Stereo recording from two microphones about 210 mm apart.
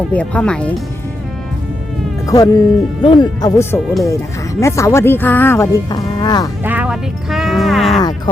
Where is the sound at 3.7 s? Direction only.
Centre (ahead or behind).